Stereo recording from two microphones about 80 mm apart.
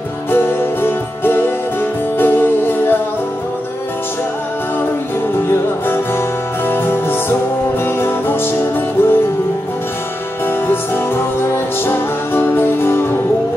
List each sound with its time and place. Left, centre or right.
0.3 s music: left
5.5 s music: left
11.3 s music: left